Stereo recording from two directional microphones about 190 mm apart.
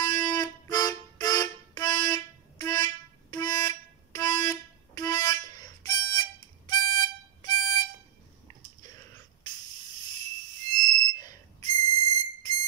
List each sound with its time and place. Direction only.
0.0 s music: 20° left (ahead or behind)
6.7 s harmonica: 25° left (ahead or behind)
10.7 s music: 20° left (ahead or behind)